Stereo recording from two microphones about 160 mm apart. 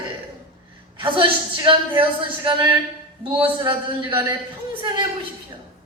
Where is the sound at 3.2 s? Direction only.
30° right (ahead or behind).